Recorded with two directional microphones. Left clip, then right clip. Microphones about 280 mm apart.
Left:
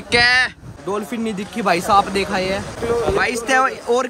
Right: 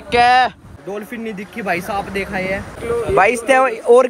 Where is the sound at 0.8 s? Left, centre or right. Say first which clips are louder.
Left 3 dB; centre.